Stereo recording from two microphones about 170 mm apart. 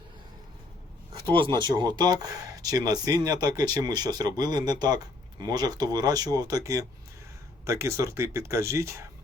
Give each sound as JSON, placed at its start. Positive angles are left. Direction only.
{"t": 1.3, "sound": "speech", "side_deg": -30}